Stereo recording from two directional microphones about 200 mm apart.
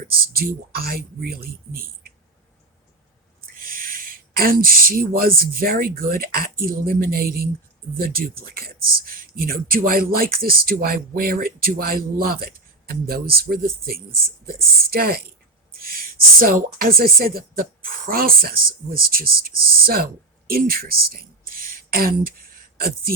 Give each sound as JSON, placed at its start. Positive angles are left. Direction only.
{"t": 0.3, "sound": "speech", "side_deg": -50}
{"t": 3.6, "sound": "speech", "side_deg": -45}
{"t": 16.4, "sound": "speech", "side_deg": -45}
{"t": 20.5, "sound": "a sound", "side_deg": -50}